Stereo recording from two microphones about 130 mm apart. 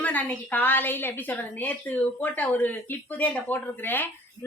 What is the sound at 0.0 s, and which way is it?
A woman's voice, 15° left (ahead or behind).